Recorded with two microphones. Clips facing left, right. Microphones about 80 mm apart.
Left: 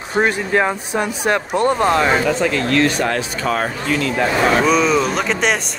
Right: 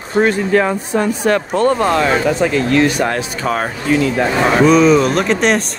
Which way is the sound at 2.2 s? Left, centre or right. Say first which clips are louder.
Right 3 dB; centre.